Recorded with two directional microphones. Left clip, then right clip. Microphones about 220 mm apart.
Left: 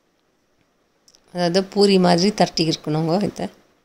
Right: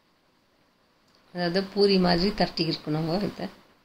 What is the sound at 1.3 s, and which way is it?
Speech, 45° left (ahead or behind).